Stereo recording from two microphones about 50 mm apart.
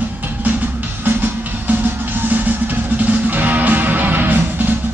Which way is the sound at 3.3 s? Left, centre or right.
Right.